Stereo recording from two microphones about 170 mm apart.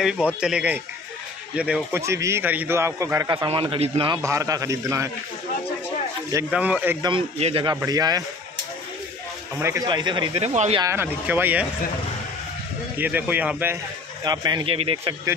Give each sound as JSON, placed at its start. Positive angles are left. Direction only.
{"t": 0.4, "sound": "a man's voice", "side_deg": -5}
{"t": 3.4, "sound": "a man's voice", "side_deg": -30}
{"t": 4.2, "sound": "speech", "side_deg": -20}
{"t": 6.5, "sound": "a man's voice", "side_deg": -10}
{"t": 7.0, "sound": "a man's voice", "side_deg": -30}
{"t": 7.7, "sound": "speech", "side_deg": -20}
{"t": 9.6, "sound": "speech", "side_deg": -20}
{"t": 10.8, "sound": "a man's voice", "side_deg": -15}
{"t": 12.9, "sound": "a man's voice", "side_deg": -10}
{"t": 14.2, "sound": "speech", "side_deg": -25}